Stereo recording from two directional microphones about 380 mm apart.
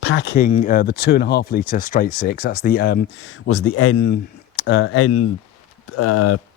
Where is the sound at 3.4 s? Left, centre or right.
Left.